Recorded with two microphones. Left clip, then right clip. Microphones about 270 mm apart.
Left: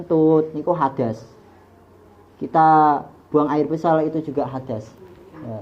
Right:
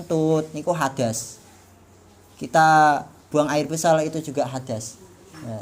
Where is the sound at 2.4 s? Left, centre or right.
Right.